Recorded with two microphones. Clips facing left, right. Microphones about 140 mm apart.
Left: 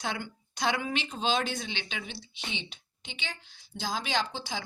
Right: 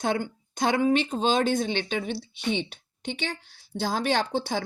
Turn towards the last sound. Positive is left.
turn(degrees=-55)  # may be behind; listen again after turning